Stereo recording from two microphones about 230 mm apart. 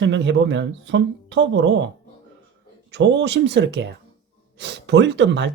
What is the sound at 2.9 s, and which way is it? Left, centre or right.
Speech, right.